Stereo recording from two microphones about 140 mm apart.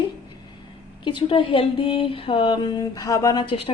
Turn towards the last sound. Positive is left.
turn(degrees=40)  # may be behind; listen again after turning